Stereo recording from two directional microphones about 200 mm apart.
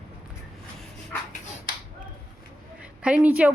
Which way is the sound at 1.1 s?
10° left (ahead or behind).